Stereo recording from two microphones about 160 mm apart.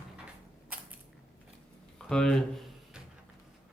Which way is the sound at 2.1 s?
5° left (ahead or behind).